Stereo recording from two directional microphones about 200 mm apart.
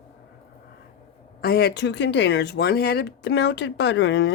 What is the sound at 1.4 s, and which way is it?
Speech, 50° left (ahead or behind).